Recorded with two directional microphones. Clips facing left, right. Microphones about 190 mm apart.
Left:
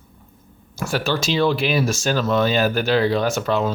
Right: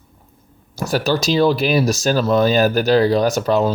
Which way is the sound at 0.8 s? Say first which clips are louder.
Right 4 dB; 40° right (ahead or behind).